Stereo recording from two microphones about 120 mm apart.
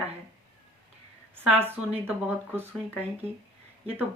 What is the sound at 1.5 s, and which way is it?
Speech, 20° right (ahead or behind).